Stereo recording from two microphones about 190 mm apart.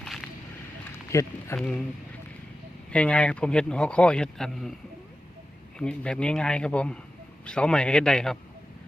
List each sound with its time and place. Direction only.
0.0 s a sound: centre (ahead or behind)
1.1 s speech: 15° left (ahead or behind)
1.5 s a man's voice: 5° left (ahead or behind)
2.9 s a man's voice: 5° left (ahead or behind)
5.8 s a man's voice: 5° left (ahead or behind)